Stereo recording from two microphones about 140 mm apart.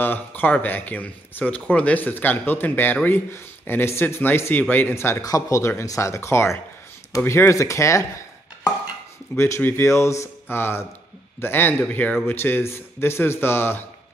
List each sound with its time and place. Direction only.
0.0 s speech: 10° left (ahead or behind)
9.3 s speech: 15° left (ahead or behind)